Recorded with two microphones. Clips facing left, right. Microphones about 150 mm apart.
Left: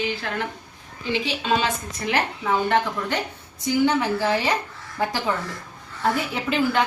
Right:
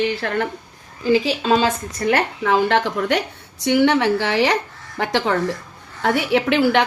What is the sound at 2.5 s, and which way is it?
A woman's voice, 90° right.